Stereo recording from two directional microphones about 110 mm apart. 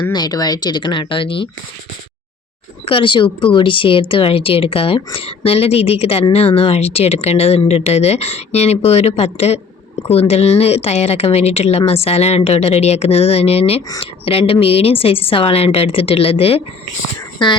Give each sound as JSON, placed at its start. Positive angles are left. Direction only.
{"t": 0.1, "sound": "speech", "side_deg": 35}
{"t": 2.8, "sound": "a woman's voice", "side_deg": 50}